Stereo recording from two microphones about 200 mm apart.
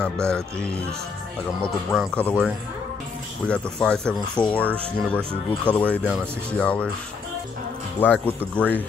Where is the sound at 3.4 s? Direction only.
5° left (ahead or behind).